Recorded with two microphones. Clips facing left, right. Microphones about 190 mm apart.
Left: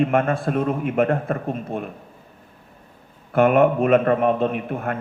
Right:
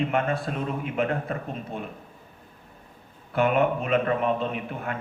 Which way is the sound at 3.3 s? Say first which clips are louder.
Left 6 dB; 50° left (ahead or behind).